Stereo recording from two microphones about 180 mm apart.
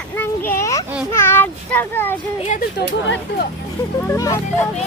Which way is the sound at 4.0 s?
15° left (ahead or behind).